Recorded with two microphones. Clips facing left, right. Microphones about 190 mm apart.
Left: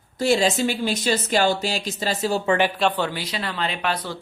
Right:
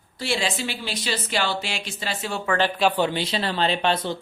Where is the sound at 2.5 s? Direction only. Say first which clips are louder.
Left 1 dB; 15° left (ahead or behind).